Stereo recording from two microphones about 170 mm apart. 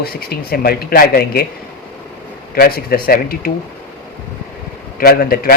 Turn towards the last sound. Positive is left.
turn(degrees=60)  # may be behind; listen again after turning